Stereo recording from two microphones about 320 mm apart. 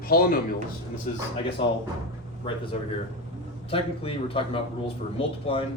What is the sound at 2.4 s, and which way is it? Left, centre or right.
Speech, centre.